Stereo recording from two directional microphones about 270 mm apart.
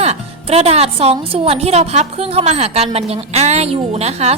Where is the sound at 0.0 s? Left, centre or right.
Right.